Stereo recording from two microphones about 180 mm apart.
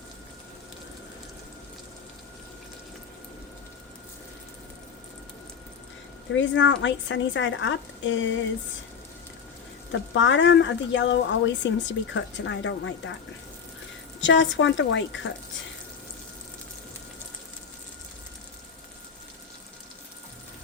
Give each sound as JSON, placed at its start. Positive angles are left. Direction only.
{"t": 6.3, "sound": "speech", "side_deg": 90}
{"t": 9.9, "sound": "speech", "side_deg": 90}
{"t": 14.2, "sound": "speech", "side_deg": 90}